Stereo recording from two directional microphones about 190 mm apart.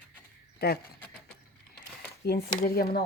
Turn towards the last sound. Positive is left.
turn(degrees=55)  # may be behind; listen again after turning